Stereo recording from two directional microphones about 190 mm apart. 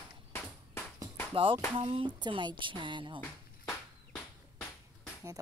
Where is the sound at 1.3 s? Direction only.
25° right (ahead or behind).